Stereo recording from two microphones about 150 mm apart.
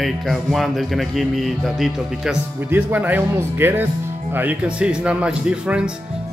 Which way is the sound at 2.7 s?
10° right (ahead or behind).